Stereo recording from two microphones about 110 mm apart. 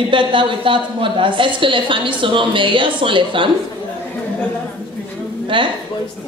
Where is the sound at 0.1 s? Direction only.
50° right (ahead or behind).